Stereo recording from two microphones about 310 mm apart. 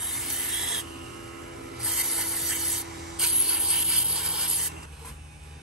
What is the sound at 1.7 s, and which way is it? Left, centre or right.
Rub, centre.